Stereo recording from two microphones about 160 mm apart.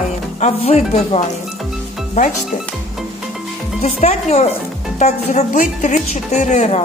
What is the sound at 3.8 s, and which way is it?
A woman's voice, 40° left (ahead or behind).